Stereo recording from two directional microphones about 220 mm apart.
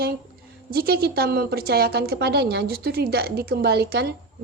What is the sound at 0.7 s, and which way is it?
A woman's voice, 45° right (ahead or behind).